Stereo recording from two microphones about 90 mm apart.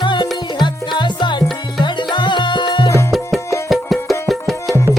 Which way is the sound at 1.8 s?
60° left (ahead or behind).